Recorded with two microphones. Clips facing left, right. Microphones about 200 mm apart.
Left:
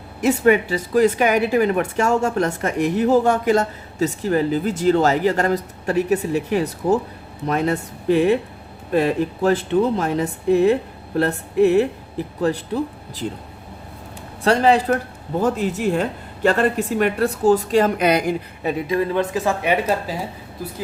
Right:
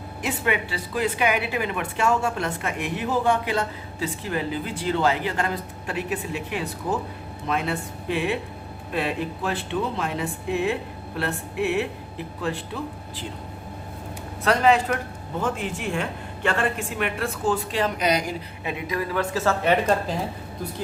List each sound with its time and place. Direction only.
0.2 s speech: 45° left (ahead or behind)
14.4 s speech: 30° left (ahead or behind); by 18.3 s 55° left (ahead or behind)
18.6 s speech: 35° left (ahead or behind); by 20.2 s 5° left (ahead or behind)